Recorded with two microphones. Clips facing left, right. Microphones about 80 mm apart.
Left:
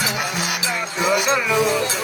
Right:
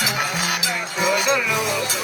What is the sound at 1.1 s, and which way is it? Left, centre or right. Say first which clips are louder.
Music: left 2 dB; left.